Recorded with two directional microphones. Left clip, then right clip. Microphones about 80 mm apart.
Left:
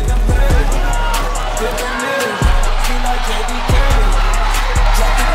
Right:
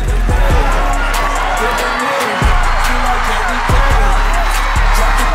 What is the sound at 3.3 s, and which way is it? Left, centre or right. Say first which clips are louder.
Music: right 5 dB; centre.